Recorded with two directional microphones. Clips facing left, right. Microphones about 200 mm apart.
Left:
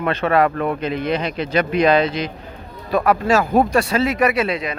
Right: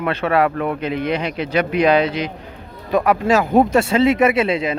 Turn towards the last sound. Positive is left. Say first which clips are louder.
# right 3 dB
turn(degrees=-25)  # may be behind; listen again after turning